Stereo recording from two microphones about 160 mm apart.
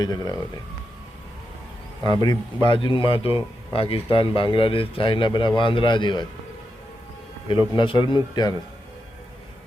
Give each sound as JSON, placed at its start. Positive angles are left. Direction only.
{"t": 0.0, "sound": "speech", "side_deg": 25}
{"t": 2.0, "sound": "a man's voice", "side_deg": 30}
{"t": 7.7, "sound": "speech", "side_deg": 30}